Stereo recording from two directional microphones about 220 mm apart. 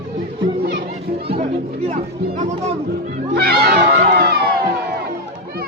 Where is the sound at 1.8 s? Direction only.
35° right (ahead or behind).